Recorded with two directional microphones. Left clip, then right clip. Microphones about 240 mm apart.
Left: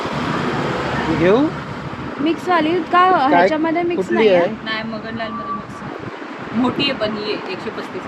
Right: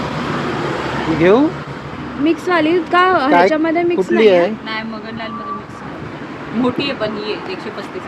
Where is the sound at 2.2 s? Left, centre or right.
Centre.